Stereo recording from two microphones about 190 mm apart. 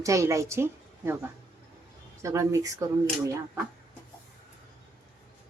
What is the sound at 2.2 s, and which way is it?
Speech, 15° right (ahead or behind).